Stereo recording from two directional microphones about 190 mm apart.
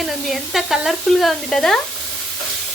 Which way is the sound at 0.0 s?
Centre (ahead or behind).